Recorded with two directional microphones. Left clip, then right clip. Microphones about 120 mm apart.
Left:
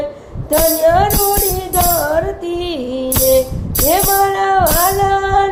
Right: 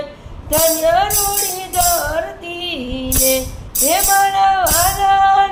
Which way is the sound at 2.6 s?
35° left (ahead or behind).